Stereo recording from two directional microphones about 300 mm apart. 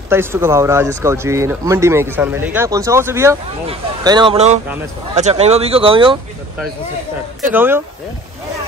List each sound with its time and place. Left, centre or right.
0.1 s speech: centre
7.5 s speech: centre